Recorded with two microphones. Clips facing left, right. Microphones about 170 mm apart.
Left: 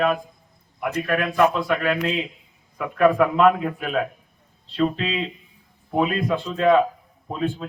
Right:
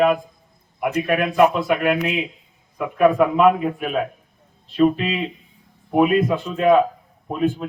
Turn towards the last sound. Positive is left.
turn(degrees=-10)  # may be behind; listen again after turning